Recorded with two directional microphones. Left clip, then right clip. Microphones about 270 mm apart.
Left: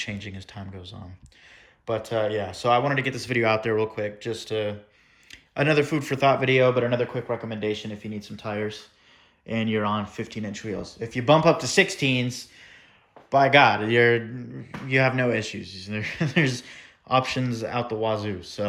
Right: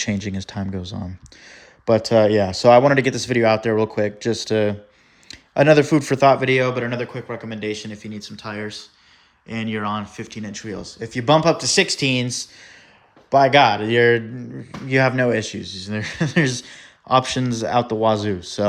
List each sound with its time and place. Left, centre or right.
0.0 s speech: centre